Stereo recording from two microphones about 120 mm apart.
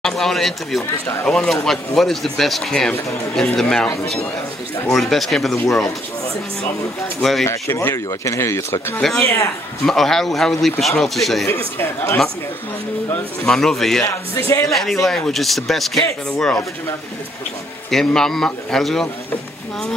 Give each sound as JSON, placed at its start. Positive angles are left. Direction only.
{"t": 0.0, "sound": "a man's voice", "side_deg": 5}
{"t": 7.2, "sound": "a man's voice", "side_deg": 0}
{"t": 7.4, "sound": "speech", "side_deg": 20}
{"t": 9.8, "sound": "a man's voice", "side_deg": 5}
{"t": 11.4, "sound": "speech", "side_deg": 20}
{"t": 13.5, "sound": "a man's voice", "side_deg": 5}
{"t": 14.3, "sound": "speech", "side_deg": 25}
{"t": 14.7, "sound": "a man's voice", "side_deg": 0}
{"t": 17.9, "sound": "a man's voice", "side_deg": 5}